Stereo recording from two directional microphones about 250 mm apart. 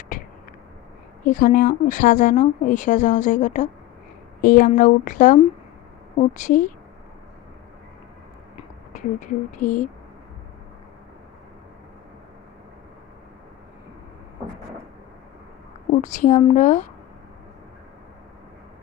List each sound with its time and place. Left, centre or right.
1.2 s a woman's voice: left
8.5 s speech: left
15.9 s a woman's voice: left